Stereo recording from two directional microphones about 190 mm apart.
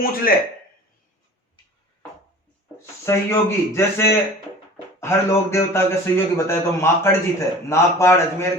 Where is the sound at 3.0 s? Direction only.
15° left (ahead or behind).